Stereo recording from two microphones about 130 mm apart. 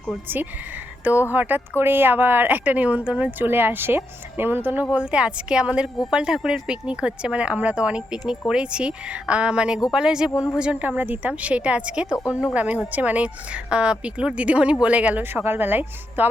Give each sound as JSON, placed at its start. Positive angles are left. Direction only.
{"t": 1.3, "sound": "speech", "side_deg": -15}